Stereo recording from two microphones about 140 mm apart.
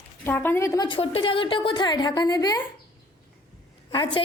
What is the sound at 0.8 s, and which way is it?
A woman's voice, 40° left (ahead or behind).